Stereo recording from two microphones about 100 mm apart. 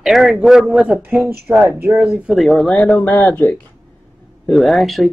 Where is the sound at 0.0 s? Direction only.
Centre (ahead or behind).